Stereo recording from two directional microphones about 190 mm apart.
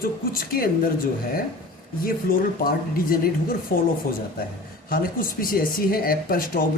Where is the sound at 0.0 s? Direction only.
50° left (ahead or behind).